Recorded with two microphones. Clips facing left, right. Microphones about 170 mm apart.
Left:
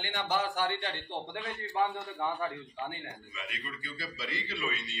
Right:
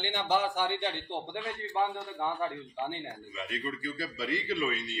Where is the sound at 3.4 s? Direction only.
40° right (ahead or behind).